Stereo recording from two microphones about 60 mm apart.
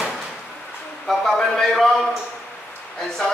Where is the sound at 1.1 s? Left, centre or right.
Centre.